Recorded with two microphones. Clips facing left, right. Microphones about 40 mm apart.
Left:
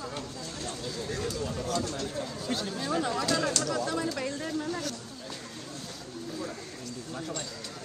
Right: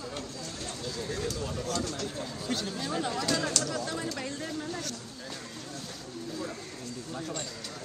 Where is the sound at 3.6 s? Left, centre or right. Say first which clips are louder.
Left 3 dB; left.